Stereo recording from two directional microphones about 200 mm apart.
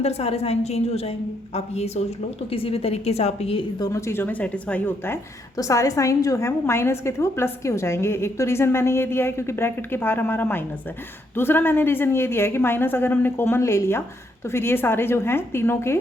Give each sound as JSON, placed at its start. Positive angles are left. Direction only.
{"t": 0.0, "sound": "a woman's voice", "side_deg": 30}